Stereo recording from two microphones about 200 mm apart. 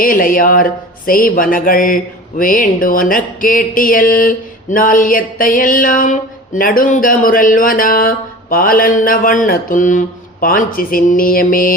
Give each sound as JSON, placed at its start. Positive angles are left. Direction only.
{"t": 0.0, "sound": "speech", "side_deg": 45}